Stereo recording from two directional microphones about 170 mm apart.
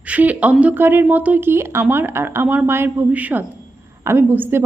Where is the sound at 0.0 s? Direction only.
10° right (ahead or behind).